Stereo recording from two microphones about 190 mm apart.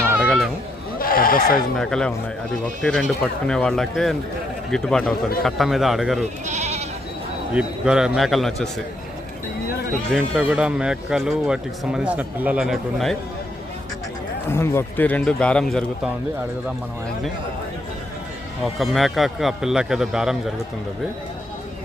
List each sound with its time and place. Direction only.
0.1 s a sound: 5° right (ahead or behind)
0.9 s a sound: 50° left (ahead or behind)
1.7 s speech: 5° left (ahead or behind)
6.4 s goat: 40° right (ahead or behind)
7.5 s speech: 5° right (ahead or behind)
10.1 s speech: centre (ahead or behind)
14.5 s speech: 15° left (ahead or behind)
18.8 s speech: centre (ahead or behind)